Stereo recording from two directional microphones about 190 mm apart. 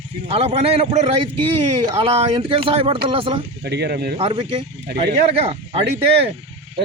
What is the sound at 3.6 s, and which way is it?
Speech, 60° right (ahead or behind).